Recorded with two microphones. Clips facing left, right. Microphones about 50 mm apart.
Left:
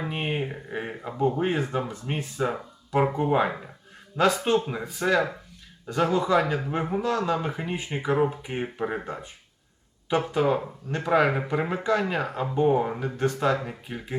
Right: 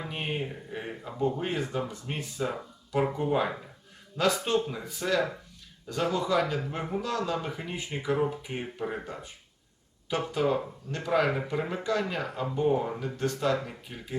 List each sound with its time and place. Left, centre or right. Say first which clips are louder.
0.0 s speech: left 4 dB; left
10.3 s speech: left 3 dB; left